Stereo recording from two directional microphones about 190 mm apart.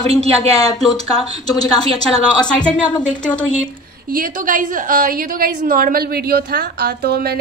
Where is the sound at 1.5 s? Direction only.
20° left (ahead or behind).